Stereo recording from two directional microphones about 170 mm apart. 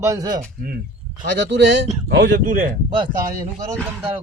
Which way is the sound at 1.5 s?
90° right.